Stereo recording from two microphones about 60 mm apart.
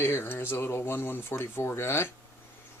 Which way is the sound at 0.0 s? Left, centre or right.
Left.